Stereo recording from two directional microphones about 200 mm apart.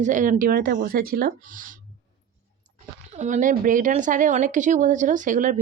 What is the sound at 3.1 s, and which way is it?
Speech, 35° right (ahead or behind).